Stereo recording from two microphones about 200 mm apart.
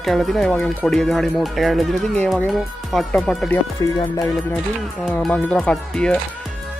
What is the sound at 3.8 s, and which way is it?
Speech, 15° left (ahead or behind).